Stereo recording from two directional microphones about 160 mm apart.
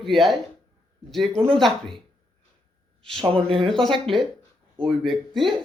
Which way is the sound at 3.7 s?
Centre (ahead or behind).